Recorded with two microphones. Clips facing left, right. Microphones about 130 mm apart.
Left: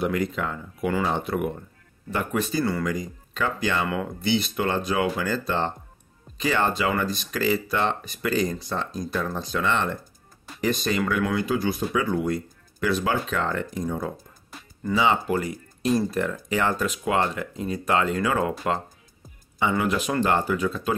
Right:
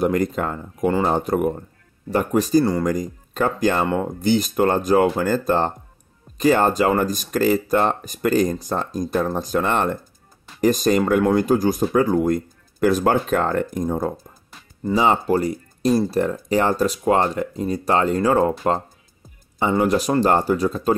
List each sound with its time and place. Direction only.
0.0 s speech: 45° right (ahead or behind)